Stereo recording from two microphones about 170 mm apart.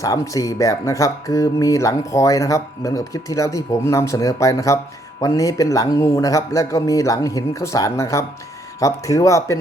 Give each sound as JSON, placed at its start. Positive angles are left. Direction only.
{"t": 0.0, "sound": "speech", "side_deg": 20}